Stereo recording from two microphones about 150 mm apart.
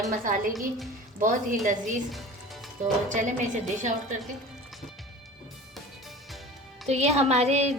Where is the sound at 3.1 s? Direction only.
55° right (ahead or behind).